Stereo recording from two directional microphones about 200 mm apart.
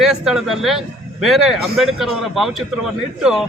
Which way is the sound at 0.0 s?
Centre (ahead or behind).